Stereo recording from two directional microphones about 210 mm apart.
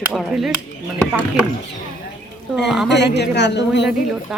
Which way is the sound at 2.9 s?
55° left (ahead or behind).